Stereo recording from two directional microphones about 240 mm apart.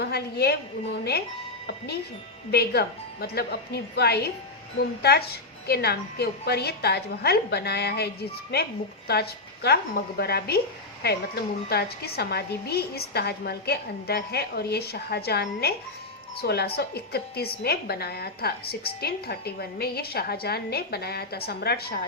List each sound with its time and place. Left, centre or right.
0.0 s a woman's voice: left
2.5 s a woman's voice: left